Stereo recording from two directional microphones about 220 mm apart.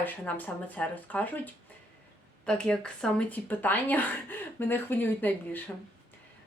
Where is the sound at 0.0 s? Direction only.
10° left (ahead or behind).